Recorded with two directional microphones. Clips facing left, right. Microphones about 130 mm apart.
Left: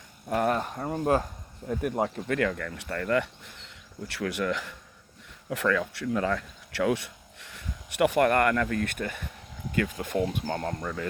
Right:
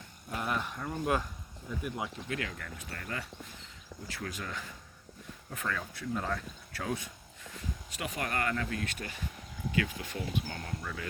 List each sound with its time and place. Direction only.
0.3 s speech: 50° left (ahead or behind); by 1.3 s 35° left (ahead or behind)
1.6 s speech: 55° left (ahead or behind); by 4.7 s 75° left (ahead or behind)
5.5 s speech: 85° left; by 11.0 s 50° left (ahead or behind)